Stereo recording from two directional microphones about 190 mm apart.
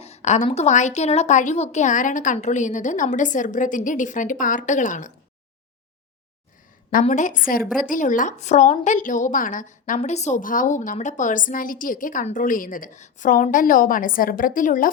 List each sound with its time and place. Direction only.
0.0 s a woman's voice: 35° left (ahead or behind)
7.0 s a woman's voice: 40° left (ahead or behind)